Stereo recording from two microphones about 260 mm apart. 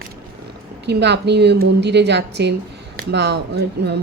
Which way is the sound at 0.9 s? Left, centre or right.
Right.